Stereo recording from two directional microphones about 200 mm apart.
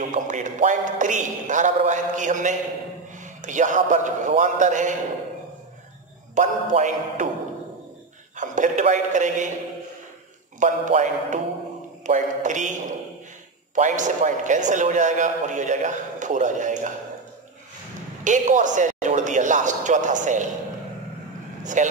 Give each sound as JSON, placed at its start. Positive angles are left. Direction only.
{"t": 0.0, "sound": "a man's voice", "side_deg": -40}
{"t": 6.3, "sound": "a man's voice", "side_deg": -40}
{"t": 8.4, "sound": "a man's voice", "side_deg": -40}
{"t": 10.6, "sound": "a man's voice", "side_deg": -40}
{"t": 18.2, "sound": "a man's voice", "side_deg": -40}
{"t": 21.8, "sound": "a man's voice", "side_deg": -40}